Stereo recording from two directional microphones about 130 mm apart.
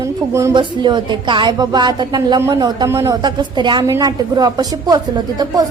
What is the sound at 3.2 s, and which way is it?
A woman's voice, 35° right (ahead or behind).